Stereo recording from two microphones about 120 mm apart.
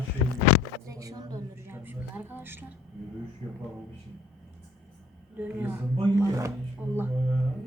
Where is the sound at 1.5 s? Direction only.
20° right (ahead or behind).